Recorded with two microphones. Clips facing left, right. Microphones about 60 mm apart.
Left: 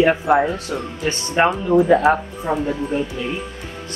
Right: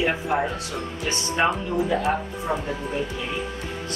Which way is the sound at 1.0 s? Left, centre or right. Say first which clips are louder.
Left 5 dB; left.